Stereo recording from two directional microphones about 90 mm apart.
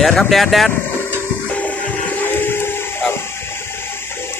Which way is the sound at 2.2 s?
25° left (ahead or behind).